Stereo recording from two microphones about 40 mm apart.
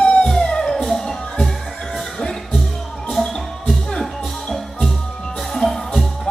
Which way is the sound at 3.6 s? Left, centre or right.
Centre.